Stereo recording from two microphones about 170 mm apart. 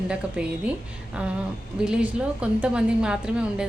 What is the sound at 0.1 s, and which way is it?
A woman's voice, 5° right (ahead or behind).